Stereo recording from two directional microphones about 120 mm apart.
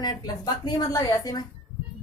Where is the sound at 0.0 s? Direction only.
35° left (ahead or behind).